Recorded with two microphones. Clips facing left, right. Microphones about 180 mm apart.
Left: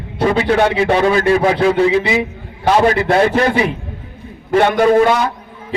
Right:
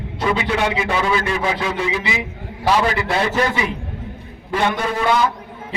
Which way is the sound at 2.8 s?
45° left (ahead or behind).